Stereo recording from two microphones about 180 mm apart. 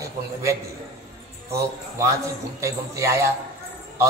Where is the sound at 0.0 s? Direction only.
15° right (ahead or behind).